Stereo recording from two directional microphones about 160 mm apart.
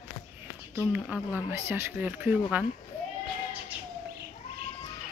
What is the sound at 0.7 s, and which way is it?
Speech, 10° right (ahead or behind).